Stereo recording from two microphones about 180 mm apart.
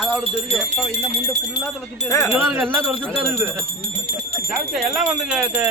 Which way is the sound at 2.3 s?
10° right (ahead or behind).